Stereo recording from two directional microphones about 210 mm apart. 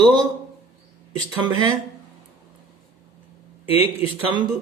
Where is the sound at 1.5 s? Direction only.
20° right (ahead or behind).